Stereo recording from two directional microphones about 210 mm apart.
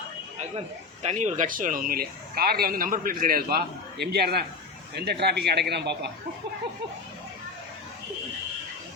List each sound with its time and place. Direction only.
1.0 s speech: 35° right (ahead or behind); by 6.1 s 50° right (ahead or behind)